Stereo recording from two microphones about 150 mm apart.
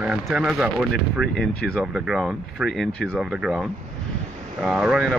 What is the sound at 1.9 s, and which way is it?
Speech, 5° right (ahead or behind).